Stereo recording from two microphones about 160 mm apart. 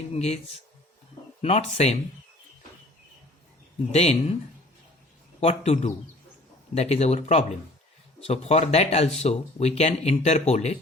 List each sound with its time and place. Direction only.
0.1 s speech: 40° left (ahead or behind)
1.4 s speech: 40° left (ahead or behind)
3.9 s speech: 40° left (ahead or behind)
5.4 s speech: 40° left (ahead or behind)